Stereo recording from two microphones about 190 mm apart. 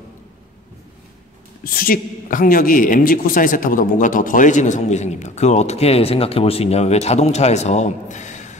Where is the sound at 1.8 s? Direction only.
45° left (ahead or behind).